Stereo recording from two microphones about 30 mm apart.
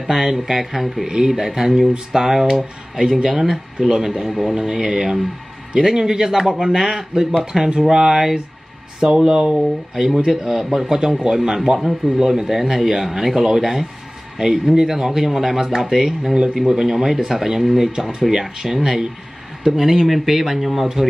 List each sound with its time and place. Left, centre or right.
0.0 s speech: centre
1.0 s speech: centre
4.3 s speech: centre
4.6 s speech: centre
9.0 s speech: right
14.4 s speech: right; by 18.8 s centre
18.8 s speech: right
19.7 s speech: centre